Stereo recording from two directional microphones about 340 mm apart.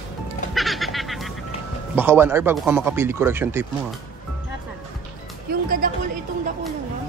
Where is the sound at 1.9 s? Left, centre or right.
Centre.